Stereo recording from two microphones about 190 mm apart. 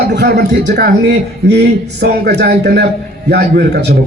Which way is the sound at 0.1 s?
55° right (ahead or behind).